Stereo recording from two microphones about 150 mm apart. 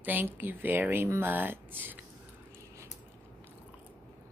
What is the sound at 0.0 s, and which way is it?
Speech, 10° right (ahead or behind).